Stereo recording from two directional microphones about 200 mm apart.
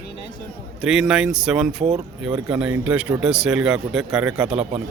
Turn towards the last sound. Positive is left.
turn(degrees=-5)  # may be behind; listen again after turning